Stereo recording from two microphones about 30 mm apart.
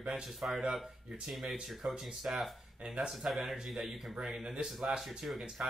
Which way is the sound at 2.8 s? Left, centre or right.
Right.